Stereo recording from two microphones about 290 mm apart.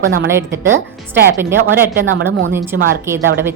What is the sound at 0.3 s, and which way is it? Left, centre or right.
A woman's voice, centre.